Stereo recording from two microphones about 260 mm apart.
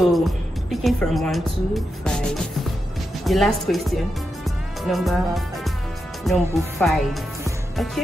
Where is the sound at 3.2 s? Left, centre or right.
Centre.